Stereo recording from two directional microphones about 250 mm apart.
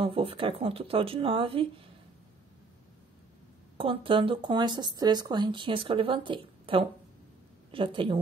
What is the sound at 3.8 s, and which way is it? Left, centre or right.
Speech, right.